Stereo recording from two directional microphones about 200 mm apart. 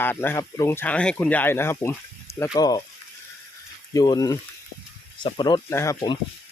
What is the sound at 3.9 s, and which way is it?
Speech, 20° left (ahead or behind).